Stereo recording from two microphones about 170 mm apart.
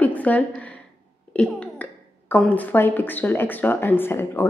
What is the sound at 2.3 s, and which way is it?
A woman's voice, 10° left (ahead or behind).